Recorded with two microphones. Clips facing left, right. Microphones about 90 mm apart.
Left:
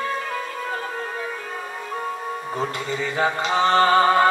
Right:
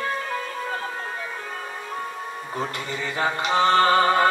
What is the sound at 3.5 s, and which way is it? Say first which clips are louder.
Music: left 1 dB; 25° left (ahead or behind).